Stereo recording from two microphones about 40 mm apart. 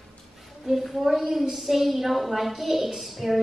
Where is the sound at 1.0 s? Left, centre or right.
Centre.